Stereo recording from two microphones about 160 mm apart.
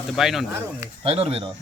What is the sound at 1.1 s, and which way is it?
Speech, 40° right (ahead or behind).